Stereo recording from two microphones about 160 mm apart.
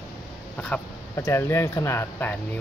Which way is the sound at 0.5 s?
10° left (ahead or behind).